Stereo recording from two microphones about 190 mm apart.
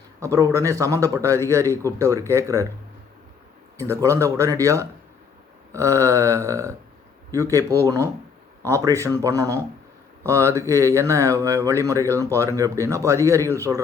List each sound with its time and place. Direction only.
0.2 s speech: 15° right (ahead or behind)
3.8 s speech: 15° right (ahead or behind)